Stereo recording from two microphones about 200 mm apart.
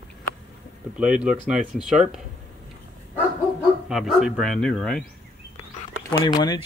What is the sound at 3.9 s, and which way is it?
Speech, centre (ahead or behind).